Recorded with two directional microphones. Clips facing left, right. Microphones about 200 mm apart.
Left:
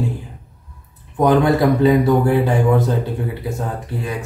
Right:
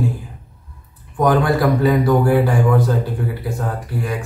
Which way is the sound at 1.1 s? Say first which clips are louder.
Left 2 dB; 20° left (ahead or behind).